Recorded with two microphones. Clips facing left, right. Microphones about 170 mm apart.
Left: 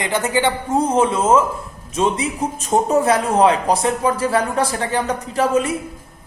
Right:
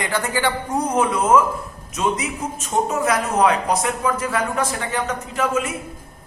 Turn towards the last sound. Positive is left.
turn(degrees=35)  # may be behind; listen again after turning